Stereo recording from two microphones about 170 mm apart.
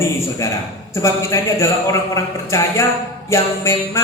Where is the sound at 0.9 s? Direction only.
15° left (ahead or behind).